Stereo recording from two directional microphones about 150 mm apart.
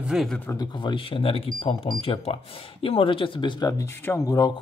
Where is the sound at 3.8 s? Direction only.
15° left (ahead or behind).